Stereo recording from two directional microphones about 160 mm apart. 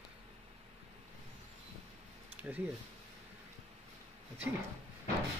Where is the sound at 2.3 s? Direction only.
10° right (ahead or behind).